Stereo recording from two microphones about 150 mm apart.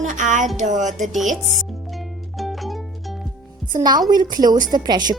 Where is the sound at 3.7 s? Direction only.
25° right (ahead or behind).